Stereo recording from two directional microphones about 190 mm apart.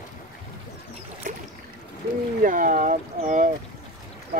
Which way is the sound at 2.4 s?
45° right (ahead or behind).